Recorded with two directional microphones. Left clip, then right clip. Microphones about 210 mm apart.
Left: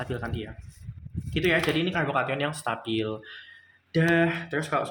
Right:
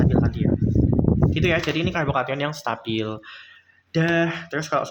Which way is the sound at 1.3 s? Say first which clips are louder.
Left 2 dB; 25° right (ahead or behind).